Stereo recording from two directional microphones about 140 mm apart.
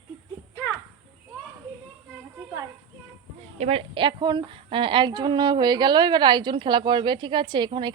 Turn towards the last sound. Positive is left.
turn(degrees=-35)  # may be behind; listen again after turning